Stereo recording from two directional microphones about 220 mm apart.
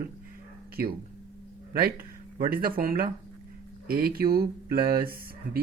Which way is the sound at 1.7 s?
40° right (ahead or behind).